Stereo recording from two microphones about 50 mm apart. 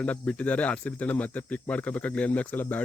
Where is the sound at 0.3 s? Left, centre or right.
Left.